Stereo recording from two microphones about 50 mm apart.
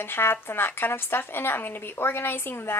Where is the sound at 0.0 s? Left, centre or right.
Left.